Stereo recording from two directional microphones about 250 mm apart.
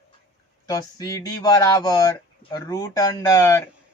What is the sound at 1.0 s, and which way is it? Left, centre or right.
Speech, centre.